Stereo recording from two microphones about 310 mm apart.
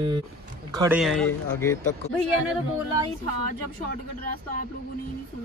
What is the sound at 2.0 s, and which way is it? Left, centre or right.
Speech, left.